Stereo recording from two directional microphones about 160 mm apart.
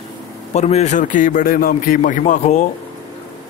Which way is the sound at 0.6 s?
45° left (ahead or behind).